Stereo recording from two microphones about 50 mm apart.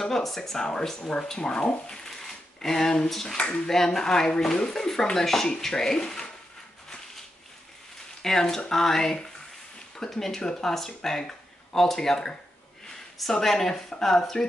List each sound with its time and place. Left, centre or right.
0.0 s speech: centre
3.3 s speech: left
3.7 s speech: centre
8.2 s speech: centre